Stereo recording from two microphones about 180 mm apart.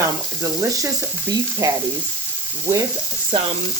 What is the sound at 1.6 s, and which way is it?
Speech, 20° right (ahead or behind).